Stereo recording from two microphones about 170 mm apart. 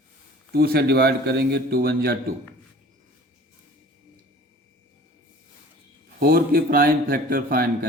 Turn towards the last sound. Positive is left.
turn(degrees=-55)  # may be behind; listen again after turning